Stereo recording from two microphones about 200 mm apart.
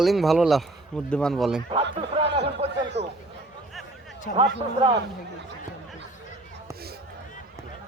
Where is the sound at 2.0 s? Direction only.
25° right (ahead or behind).